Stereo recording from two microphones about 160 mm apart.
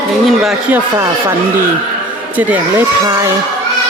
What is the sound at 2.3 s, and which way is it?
Speech, 10° right (ahead or behind).